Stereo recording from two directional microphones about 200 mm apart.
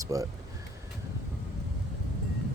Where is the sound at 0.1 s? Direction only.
15° right (ahead or behind).